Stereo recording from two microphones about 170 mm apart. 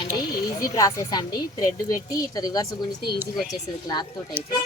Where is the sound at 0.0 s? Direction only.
25° left (ahead or behind).